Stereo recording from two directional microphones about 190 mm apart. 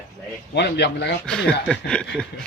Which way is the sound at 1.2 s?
5° left (ahead or behind).